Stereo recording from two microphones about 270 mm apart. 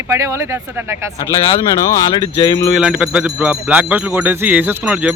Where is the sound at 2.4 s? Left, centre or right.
Centre.